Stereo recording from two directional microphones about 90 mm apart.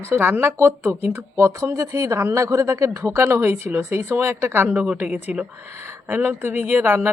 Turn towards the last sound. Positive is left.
turn(degrees=-25)  # may be behind; listen again after turning